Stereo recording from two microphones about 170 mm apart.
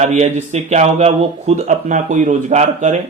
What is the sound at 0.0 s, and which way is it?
A man's voice, 40° right (ahead or behind).